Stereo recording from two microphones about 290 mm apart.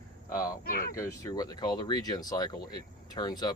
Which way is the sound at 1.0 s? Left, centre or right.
Centre.